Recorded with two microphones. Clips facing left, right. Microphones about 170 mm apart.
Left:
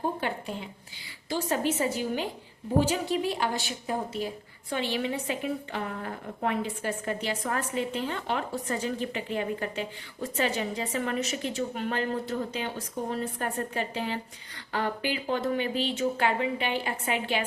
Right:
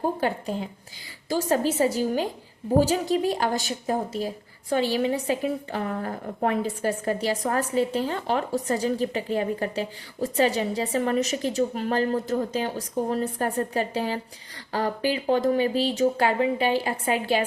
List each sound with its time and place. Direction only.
0.2 s a woman's voice: 40° right (ahead or behind)